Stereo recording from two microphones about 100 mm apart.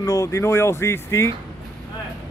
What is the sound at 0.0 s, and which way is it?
Speech, 30° left (ahead or behind).